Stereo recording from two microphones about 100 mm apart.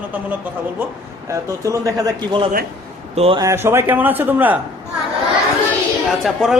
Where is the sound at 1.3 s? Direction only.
35° right (ahead or behind).